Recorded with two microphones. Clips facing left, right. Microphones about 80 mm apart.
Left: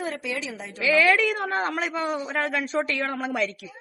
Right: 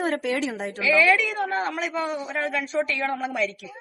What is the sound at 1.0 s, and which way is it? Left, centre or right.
A woman's voice, left.